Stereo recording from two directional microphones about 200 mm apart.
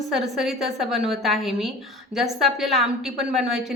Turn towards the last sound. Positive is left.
turn(degrees=0)  # may be behind; listen again after turning